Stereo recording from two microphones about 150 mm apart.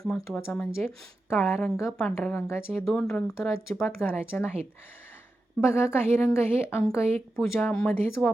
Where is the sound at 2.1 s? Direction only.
15° left (ahead or behind).